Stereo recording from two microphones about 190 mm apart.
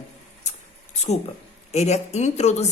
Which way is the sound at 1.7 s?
35° left (ahead or behind).